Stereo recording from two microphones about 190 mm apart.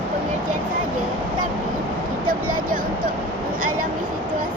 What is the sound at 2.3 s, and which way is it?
Speech, 45° right (ahead or behind).